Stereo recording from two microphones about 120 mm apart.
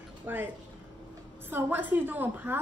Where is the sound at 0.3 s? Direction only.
15° right (ahead or behind).